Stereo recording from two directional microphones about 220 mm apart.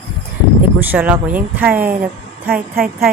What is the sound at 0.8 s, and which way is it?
Speech, 5° right (ahead or behind).